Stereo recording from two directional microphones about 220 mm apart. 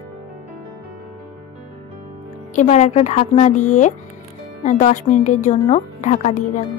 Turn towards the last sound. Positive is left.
turn(degrees=30)  # may be behind; listen again after turning